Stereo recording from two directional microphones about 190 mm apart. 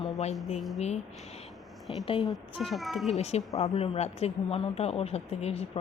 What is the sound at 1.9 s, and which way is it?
Speech, 30° left (ahead or behind).